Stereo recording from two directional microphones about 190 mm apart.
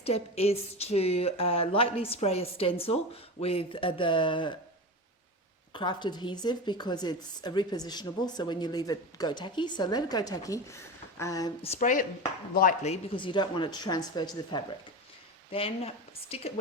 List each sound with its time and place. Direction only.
0.0 s a woman's voice: 30° left (ahead or behind)
5.7 s a woman's voice: 25° left (ahead or behind)
11.6 s a woman's voice: 40° left (ahead or behind)